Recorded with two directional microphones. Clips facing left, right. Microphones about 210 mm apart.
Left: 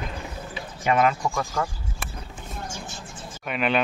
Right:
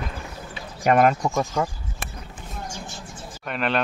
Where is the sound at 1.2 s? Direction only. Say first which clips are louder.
Right 3 dB; 20° right (ahead or behind).